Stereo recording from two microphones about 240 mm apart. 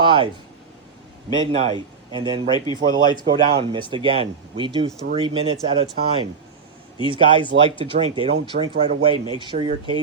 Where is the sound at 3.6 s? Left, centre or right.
Centre.